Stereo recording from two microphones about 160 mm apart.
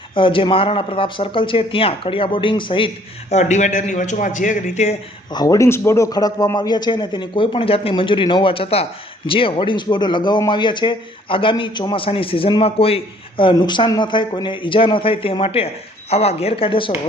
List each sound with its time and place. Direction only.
0.1 s a man's voice: 30° left (ahead or behind)
3.3 s a man's voice: 50° left (ahead or behind)
5.3 s a man's voice: 25° left (ahead or behind)